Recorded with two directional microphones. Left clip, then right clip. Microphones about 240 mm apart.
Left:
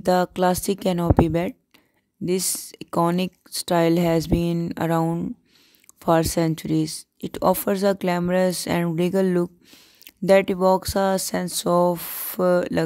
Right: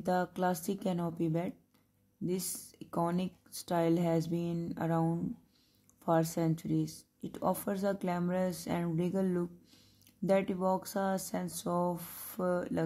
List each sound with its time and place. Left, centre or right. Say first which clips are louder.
0.0 s speech: left 12 dB; left